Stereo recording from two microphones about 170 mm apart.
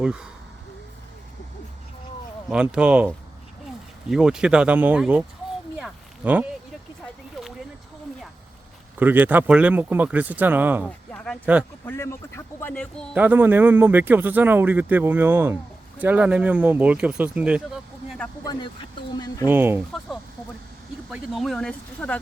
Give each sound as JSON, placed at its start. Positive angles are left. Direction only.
{"t": 0.0, "sound": "speech", "side_deg": -5}
{"t": 2.5, "sound": "speech", "side_deg": -5}
{"t": 4.1, "sound": "speech", "side_deg": -5}
{"t": 5.7, "sound": "a sound", "side_deg": -10}
{"t": 9.0, "sound": "speech", "side_deg": -10}
{"t": 10.8, "sound": "a sound", "side_deg": 5}
{"t": 11.9, "sound": "speech", "side_deg": 15}
{"t": 13.1, "sound": "speech", "side_deg": -10}
{"t": 18.4, "sound": "speech", "side_deg": 30}
{"t": 19.5, "sound": "speech", "side_deg": -10}
{"t": 21.1, "sound": "speech", "side_deg": 0}